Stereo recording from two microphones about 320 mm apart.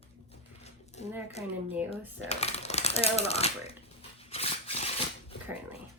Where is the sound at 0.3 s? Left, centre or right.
Centre.